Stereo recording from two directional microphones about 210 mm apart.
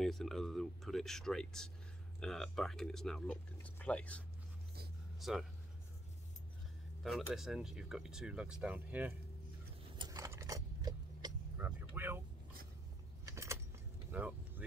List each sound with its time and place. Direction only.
0.0 s speech: centre (ahead or behind)
5.2 s speech: centre (ahead or behind)
7.0 s speech: centre (ahead or behind)
9.9 s vehicle: 20° right (ahead or behind)
11.5 s a sound: 10° right (ahead or behind)
13.2 s keys jangling: 15° right (ahead or behind)
14.1 s speech: 10° right (ahead or behind)